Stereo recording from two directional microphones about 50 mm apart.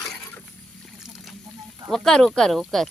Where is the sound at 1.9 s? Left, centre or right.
Centre.